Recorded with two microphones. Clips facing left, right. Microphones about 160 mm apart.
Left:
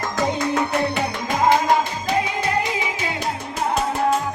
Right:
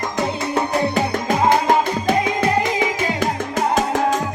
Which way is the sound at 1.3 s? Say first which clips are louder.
Even; 45° right (ahead or behind).